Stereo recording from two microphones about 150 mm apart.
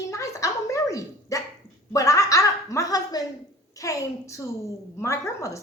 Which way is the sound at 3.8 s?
20° left (ahead or behind).